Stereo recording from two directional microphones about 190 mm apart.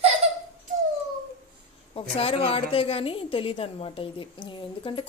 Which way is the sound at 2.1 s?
30° left (ahead or behind).